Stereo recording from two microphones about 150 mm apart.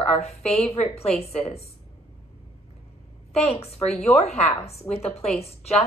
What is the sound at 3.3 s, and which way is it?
A woman's voice, 45° left (ahead or behind).